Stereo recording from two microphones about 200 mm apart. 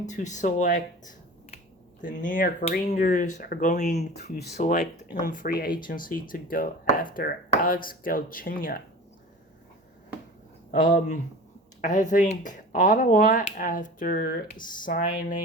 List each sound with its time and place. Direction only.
0.0 s speech: 35° left (ahead or behind)
10.7 s speech: 40° left (ahead or behind)